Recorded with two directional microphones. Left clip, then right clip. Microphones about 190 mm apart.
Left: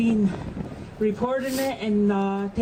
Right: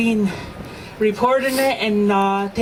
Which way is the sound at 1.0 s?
10° right (ahead or behind).